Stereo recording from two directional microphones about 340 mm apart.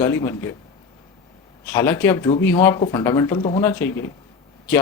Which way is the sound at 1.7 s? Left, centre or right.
Centre.